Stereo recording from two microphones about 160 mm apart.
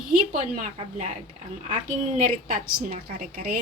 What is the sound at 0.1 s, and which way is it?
A woman's voice, 55° right (ahead or behind).